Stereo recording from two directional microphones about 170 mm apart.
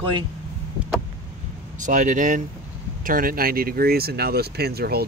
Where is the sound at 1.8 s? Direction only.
50° right (ahead or behind).